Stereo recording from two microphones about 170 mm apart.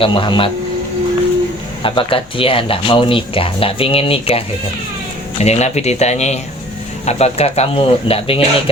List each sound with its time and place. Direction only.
0.0 s speech: 30° left (ahead or behind)
1.8 s speech: 30° left (ahead or behind)